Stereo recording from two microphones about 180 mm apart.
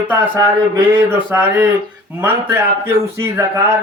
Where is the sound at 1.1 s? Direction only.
10° right (ahead or behind).